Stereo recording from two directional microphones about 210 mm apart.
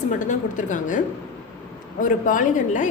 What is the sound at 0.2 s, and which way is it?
Speech, 35° left (ahead or behind).